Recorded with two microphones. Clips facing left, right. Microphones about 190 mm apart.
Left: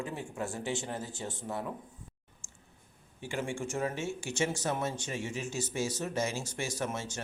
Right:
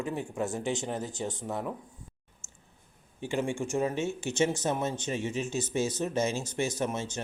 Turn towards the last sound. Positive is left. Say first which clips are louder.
# right 4 dB
turn(degrees=-20)  # may be behind; listen again after turning